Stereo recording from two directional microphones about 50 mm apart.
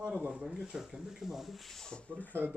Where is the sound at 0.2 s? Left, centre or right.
Right.